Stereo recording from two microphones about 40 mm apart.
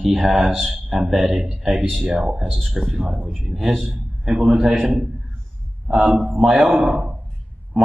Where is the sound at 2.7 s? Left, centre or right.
Centre.